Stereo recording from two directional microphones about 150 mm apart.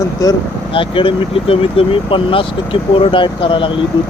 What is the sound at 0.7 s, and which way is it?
Speech, 35° left (ahead or behind).